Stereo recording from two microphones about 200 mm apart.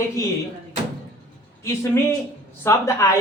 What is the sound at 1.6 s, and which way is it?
Speech, 15° left (ahead or behind).